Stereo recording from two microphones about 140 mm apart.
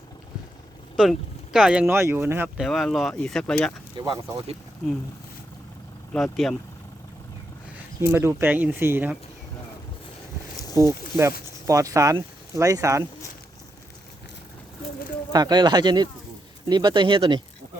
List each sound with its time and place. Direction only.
1.5 s speech: 5° right (ahead or behind)
1.9 s speech: 15° right (ahead or behind)
2.6 s speech: centre (ahead or behind)
3.9 s speech: 30° right (ahead or behind)
6.1 s speech: centre (ahead or behind)
8.0 s speech: 20° right (ahead or behind)
10.8 s speech: 20° right (ahead or behind)
15.3 s speech: 30° right (ahead or behind)